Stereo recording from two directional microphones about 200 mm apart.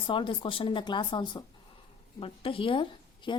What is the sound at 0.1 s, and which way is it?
A woman's voice, 25° left (ahead or behind).